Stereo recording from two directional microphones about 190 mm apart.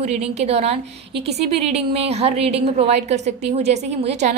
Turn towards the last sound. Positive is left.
turn(degrees=-35)  # may be behind; listen again after turning